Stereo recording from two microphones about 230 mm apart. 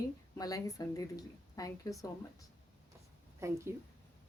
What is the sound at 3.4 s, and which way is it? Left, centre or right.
Speech, centre.